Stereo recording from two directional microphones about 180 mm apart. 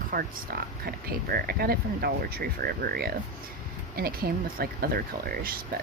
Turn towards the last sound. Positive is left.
turn(degrees=-55)  # may be behind; listen again after turning